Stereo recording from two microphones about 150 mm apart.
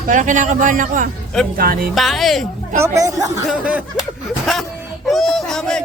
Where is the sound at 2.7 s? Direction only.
20° right (ahead or behind).